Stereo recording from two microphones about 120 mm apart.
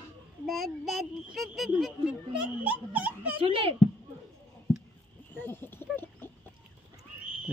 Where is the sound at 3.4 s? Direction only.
50° right (ahead or behind).